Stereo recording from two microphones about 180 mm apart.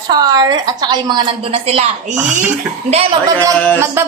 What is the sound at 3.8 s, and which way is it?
Music, 15° right (ahead or behind).